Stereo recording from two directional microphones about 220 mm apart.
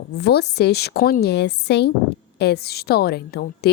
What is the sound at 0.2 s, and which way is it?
A woman's voice, 50° left (ahead or behind).